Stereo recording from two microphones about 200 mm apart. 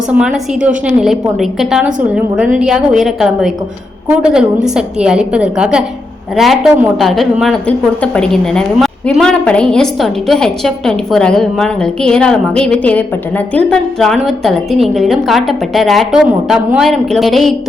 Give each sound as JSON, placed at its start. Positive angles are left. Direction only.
{"t": 0.1, "sound": "a woman's voice", "side_deg": -5}